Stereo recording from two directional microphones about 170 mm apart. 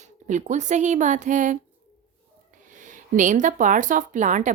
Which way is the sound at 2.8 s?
50° right (ahead or behind).